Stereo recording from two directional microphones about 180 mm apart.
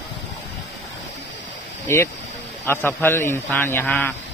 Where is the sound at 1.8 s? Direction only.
15° left (ahead or behind).